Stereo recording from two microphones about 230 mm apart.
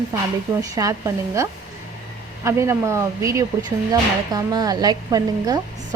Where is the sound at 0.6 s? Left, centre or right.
Centre.